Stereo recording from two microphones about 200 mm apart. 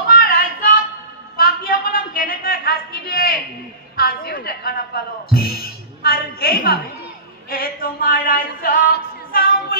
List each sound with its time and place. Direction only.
0.1 s child singing: 45° left (ahead or behind)
1.3 s a sound: 45° left (ahead or behind)
7.4 s music: 45° left (ahead or behind)